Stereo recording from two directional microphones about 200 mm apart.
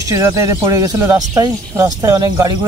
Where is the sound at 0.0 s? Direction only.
15° right (ahead or behind).